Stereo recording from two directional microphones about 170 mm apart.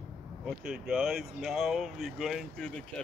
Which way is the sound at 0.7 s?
5° right (ahead or behind).